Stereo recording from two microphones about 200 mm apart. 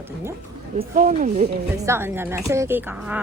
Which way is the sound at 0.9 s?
40° right (ahead or behind).